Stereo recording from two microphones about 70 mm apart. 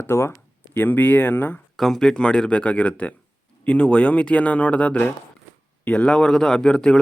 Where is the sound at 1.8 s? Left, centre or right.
Centre.